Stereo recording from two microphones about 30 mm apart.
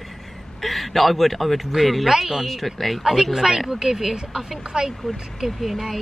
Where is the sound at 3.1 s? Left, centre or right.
Centre.